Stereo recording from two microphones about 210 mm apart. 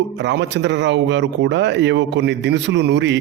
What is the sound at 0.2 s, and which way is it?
Speech, 55° right (ahead or behind).